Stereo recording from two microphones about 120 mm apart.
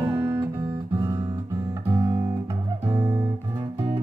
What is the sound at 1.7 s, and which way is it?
Guitar, 30° right (ahead or behind).